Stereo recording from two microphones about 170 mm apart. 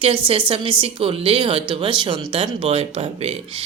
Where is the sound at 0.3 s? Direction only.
30° right (ahead or behind).